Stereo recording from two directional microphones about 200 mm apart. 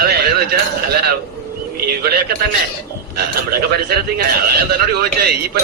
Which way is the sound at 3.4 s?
50° right (ahead or behind).